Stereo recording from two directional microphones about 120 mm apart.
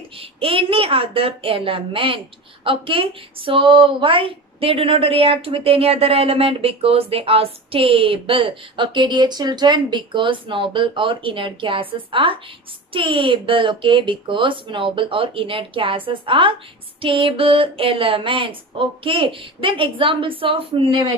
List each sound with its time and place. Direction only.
0.2 s a woman's voice: 50° right (ahead or behind)